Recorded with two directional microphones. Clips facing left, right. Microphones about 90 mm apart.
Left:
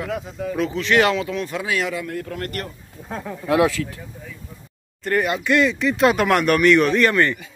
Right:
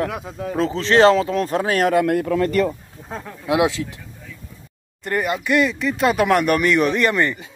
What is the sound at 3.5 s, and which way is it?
Speech, 20° right (ahead or behind).